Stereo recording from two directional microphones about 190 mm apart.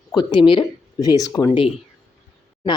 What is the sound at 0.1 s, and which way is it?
Speech, 20° left (ahead or behind).